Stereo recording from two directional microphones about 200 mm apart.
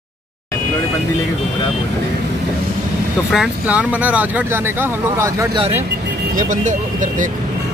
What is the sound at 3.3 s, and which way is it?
Speech, 5° right (ahead or behind).